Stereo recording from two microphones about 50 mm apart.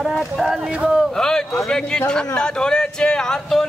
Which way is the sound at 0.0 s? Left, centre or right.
Centre.